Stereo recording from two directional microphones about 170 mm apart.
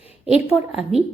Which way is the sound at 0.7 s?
5° right (ahead or behind).